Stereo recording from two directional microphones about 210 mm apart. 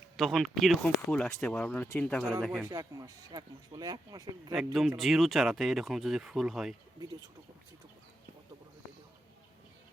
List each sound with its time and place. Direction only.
0.2 s speech: centre (ahead or behind)
2.6 s speech: 15° right (ahead or behind)
4.5 s speech: centre (ahead or behind)